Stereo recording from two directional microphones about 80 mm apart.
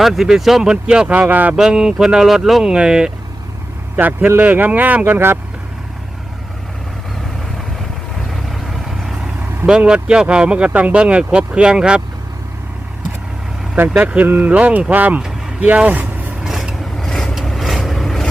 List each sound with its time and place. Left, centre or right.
0.0 s speech: centre
1.5 s speech: centre
3.9 s speech: right
8.3 s vehicle: centre
9.6 s speech: centre
13.7 s speech: centre
16.4 s vehicle: centre